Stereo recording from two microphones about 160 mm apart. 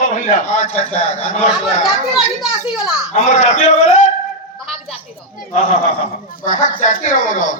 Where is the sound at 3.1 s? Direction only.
45° left (ahead or behind).